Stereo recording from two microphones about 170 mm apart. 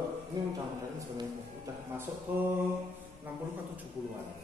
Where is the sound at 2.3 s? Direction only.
10° right (ahead or behind).